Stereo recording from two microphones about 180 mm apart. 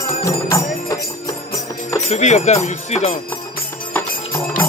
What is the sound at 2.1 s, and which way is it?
Speech, 40° left (ahead or behind).